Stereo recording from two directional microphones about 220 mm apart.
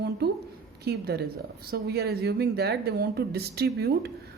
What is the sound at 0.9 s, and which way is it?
Speech, 45° right (ahead or behind).